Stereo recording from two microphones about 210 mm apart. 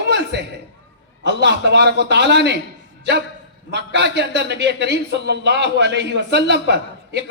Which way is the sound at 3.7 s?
55° right (ahead or behind).